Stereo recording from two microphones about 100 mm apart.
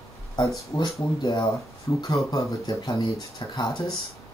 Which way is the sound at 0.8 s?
45° left (ahead or behind).